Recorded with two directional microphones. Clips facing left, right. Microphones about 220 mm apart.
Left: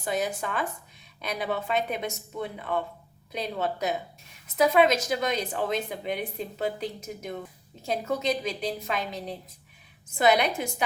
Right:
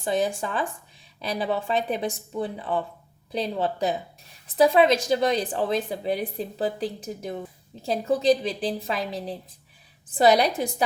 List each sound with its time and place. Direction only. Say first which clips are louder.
0.0 s speech: right 4 dB; 30° right (ahead or behind)